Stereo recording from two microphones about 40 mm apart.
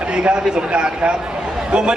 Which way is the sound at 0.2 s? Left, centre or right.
Right.